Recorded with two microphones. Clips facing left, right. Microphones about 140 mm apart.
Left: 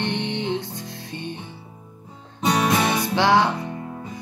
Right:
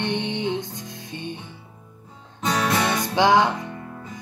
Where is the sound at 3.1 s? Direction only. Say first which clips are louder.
Right 1 dB; 15° right (ahead or behind).